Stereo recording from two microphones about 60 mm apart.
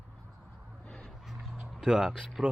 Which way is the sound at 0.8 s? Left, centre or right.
Centre.